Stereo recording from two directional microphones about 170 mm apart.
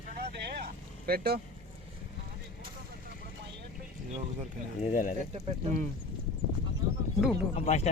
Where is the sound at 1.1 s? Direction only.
65° right (ahead or behind).